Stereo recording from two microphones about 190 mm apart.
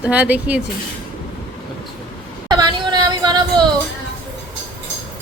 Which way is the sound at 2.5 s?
20° right (ahead or behind).